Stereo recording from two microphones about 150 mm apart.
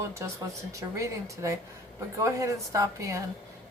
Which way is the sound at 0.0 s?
20° right (ahead or behind).